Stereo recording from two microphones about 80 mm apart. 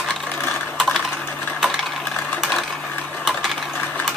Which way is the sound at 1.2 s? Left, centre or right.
Left.